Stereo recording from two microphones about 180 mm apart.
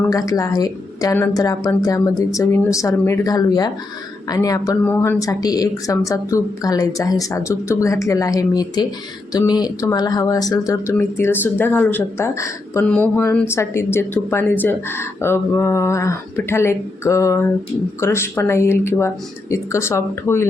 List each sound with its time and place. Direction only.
0.1 s speech: 20° left (ahead or behind)